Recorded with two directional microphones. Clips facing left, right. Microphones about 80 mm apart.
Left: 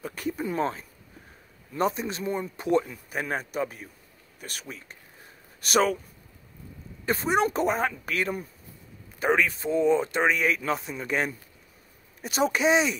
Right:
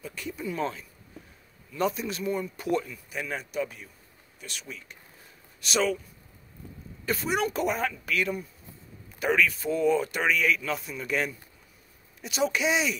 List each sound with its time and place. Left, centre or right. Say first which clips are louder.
0.0 s speech: left 4 dB; left
7.1 s speech: left 4 dB; left